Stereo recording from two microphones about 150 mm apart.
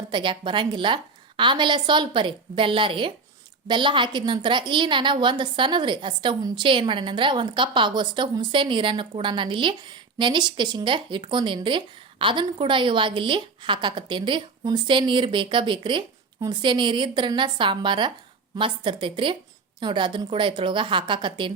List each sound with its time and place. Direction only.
0.1 s a woman's voice: 30° right (ahead or behind)